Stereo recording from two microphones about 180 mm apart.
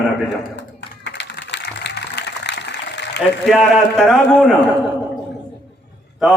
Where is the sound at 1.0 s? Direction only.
75° left (ahead or behind).